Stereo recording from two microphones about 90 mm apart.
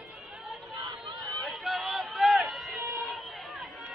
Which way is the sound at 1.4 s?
Centre (ahead or behind).